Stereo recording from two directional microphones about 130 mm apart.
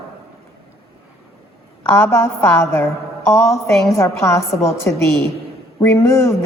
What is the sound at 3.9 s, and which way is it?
A woman's voice, 25° left (ahead or behind).